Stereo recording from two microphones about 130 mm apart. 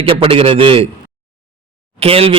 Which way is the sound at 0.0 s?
45° right (ahead or behind).